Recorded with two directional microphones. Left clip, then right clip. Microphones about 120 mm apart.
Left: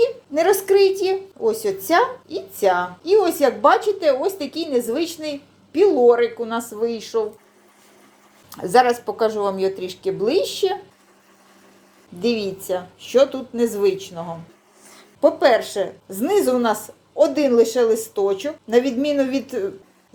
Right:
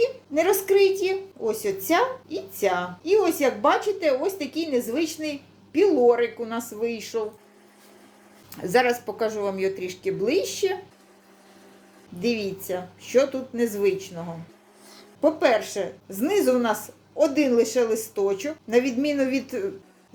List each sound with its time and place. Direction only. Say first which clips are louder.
0.0 s a woman's voice: left 4 dB; 25° left (ahead or behind)
8.6 s a woman's voice: left 5 dB; 25° left (ahead or behind)
12.2 s a woman's voice: left 4 dB; 30° left (ahead or behind)